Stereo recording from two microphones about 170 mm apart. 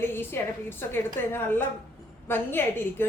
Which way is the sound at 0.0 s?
15° left (ahead or behind).